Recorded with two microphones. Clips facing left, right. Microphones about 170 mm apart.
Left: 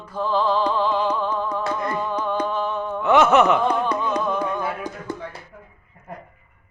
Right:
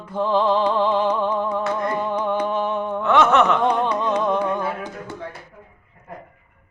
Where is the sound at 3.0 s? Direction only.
5° left (ahead or behind).